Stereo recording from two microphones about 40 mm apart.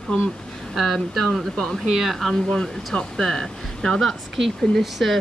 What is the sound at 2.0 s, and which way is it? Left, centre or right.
Speech, centre.